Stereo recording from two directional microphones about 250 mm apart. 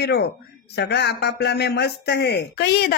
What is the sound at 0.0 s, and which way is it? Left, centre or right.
Speech, left.